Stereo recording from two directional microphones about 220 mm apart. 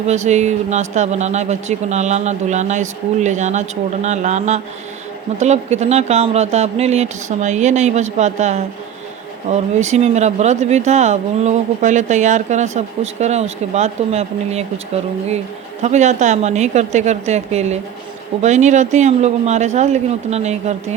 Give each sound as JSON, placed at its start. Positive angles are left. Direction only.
{"t": 0.1, "sound": "speech", "side_deg": -30}
{"t": 15.8, "sound": "speech", "side_deg": -30}